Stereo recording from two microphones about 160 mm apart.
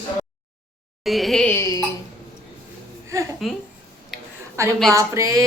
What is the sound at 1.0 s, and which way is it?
Speech, centre (ahead or behind).